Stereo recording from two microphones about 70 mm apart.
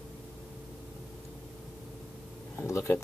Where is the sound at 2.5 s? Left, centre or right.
Left.